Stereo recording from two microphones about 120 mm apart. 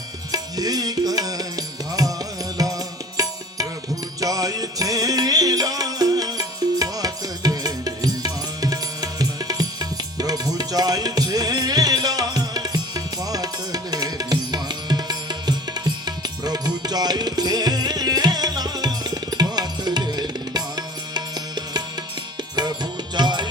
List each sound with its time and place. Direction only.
0.3 s music: 30° right (ahead or behind)